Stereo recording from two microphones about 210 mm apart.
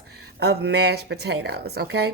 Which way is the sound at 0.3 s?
50° right (ahead or behind).